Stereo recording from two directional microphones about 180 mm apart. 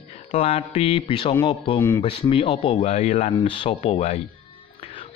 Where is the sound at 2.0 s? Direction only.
30° left (ahead or behind).